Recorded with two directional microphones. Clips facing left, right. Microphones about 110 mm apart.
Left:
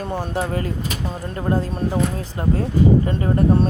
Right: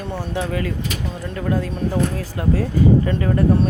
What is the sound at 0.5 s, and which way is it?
Speech, 35° left (ahead or behind).